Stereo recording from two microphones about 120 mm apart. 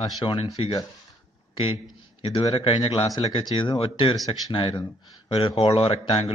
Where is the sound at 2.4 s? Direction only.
50° left (ahead or behind).